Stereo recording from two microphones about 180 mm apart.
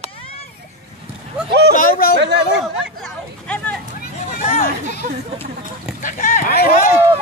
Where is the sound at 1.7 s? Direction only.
55° left (ahead or behind).